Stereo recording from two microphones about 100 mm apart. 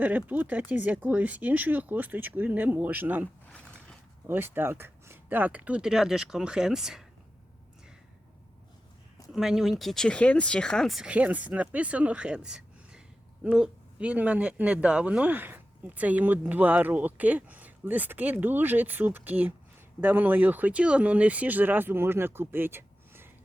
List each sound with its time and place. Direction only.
0.0 s speech: 15° right (ahead or behind)
4.3 s speech: 20° right (ahead or behind); by 7.0 s 5° right (ahead or behind)
9.3 s speech: 5° right (ahead or behind)
11.1 s speech: 15° right (ahead or behind)